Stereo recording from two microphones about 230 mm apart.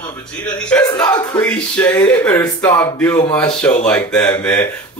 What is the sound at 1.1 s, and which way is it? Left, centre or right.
A man's voice, centre.